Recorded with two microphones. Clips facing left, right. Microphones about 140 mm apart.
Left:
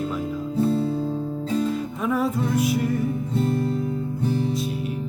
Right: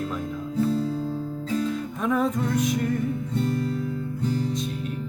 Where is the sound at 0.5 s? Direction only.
30° left (ahead or behind).